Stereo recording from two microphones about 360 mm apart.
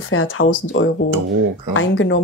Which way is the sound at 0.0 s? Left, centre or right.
Left.